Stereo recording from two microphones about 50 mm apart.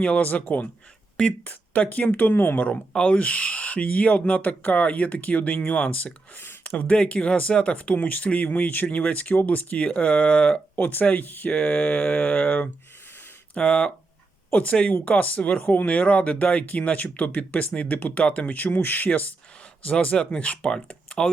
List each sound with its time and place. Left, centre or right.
0.0 s speech: left
3.0 s speech: left
7.0 s speech: left
10.8 s speech: left
13.6 s speech: centre
14.5 s speech: left
18.2 s speech: left
18.5 s speech: left
19.8 s speech: left